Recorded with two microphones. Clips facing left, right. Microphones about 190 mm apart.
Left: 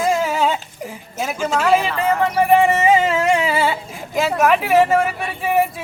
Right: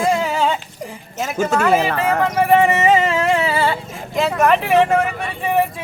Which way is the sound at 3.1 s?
10° left (ahead or behind).